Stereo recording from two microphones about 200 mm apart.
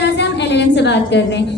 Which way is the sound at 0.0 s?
60° left (ahead or behind).